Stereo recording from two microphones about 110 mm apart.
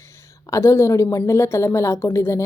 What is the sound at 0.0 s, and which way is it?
Speech, 25° left (ahead or behind).